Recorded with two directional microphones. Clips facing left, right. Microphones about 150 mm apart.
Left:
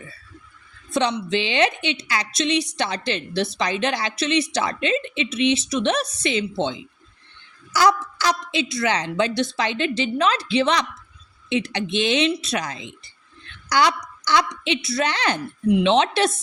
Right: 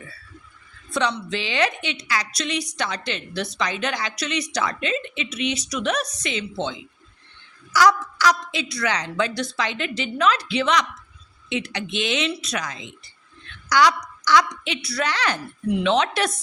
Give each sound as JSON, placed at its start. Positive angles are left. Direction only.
{"t": 0.9, "sound": "a woman's voice", "side_deg": 25}